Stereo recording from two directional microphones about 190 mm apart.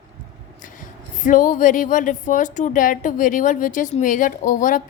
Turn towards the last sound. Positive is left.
turn(degrees=45)  # may be behind; listen again after turning